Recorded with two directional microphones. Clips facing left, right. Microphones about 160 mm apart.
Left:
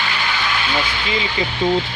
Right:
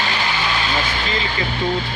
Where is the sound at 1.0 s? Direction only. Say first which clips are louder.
Left 1 dB; 15° left (ahead or behind).